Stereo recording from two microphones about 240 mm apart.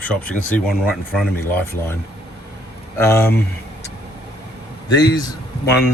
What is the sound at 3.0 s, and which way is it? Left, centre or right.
Speech, centre.